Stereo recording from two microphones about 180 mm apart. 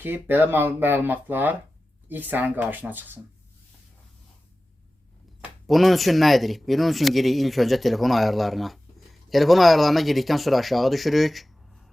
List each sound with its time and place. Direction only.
0.0 s speech: 10° right (ahead or behind)
5.6 s speech: centre (ahead or behind)